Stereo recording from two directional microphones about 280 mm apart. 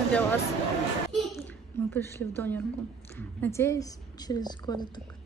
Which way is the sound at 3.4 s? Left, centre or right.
Centre.